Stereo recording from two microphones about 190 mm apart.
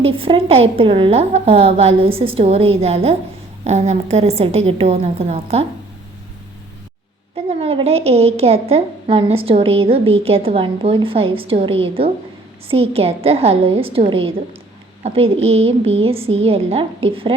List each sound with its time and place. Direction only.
0.0 s a woman's voice: 30° right (ahead or behind)
7.6 s a woman's voice: 30° right (ahead or behind)